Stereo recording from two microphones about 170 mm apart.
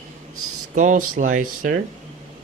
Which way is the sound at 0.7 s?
50° right (ahead or behind).